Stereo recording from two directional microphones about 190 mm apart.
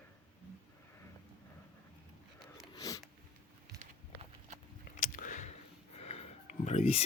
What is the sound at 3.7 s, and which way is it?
Walk, 40° right (ahead or behind).